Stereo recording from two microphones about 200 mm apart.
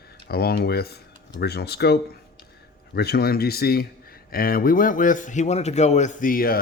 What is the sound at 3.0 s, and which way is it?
A man's voice, 50° left (ahead or behind).